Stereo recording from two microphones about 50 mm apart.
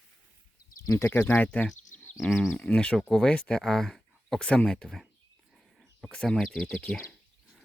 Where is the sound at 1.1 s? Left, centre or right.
Left.